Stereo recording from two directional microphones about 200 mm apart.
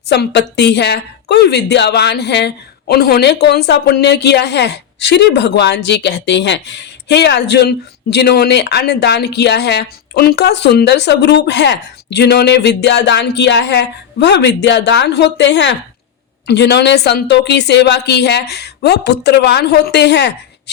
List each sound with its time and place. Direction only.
0.1 s a woman's voice: 60° left (ahead or behind)